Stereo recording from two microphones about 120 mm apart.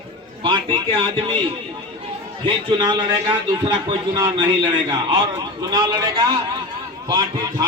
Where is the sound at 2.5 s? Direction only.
45° right (ahead or behind).